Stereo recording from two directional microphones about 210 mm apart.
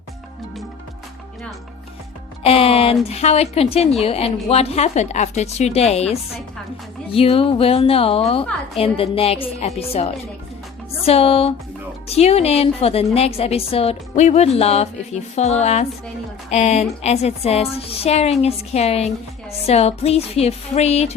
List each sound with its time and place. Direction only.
2.4 s a woman's voice: 25° left (ahead or behind)